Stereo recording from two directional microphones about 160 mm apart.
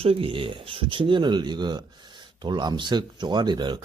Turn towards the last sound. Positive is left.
turn(degrees=-30)  # may be behind; listen again after turning